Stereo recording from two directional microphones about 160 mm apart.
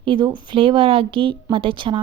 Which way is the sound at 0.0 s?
30° right (ahead or behind).